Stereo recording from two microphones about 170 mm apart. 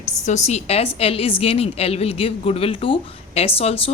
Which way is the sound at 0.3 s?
40° left (ahead or behind).